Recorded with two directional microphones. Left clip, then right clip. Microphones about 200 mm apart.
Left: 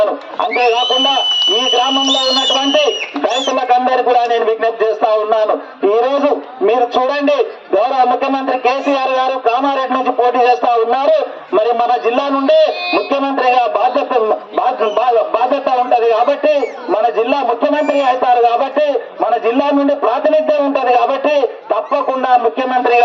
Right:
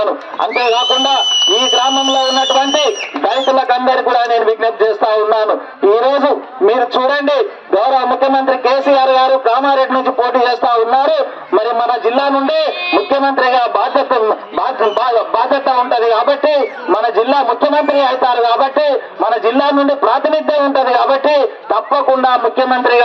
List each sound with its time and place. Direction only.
3.2 s speech: 15° right (ahead or behind)